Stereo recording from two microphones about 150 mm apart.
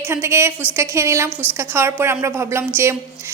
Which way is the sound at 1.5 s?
15° right (ahead or behind).